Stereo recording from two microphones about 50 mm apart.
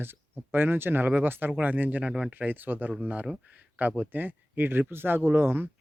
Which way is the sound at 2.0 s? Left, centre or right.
Centre.